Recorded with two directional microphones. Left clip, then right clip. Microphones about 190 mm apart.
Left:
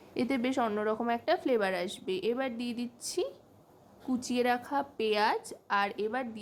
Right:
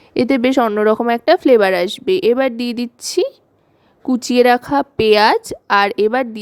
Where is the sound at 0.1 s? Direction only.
45° right (ahead or behind).